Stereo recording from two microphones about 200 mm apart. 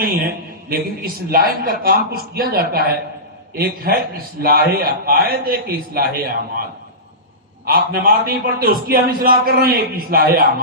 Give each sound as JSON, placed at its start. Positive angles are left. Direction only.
{"t": 0.0, "sound": "a man's voice", "side_deg": -45}
{"t": 7.6, "sound": "a man's voice", "side_deg": -45}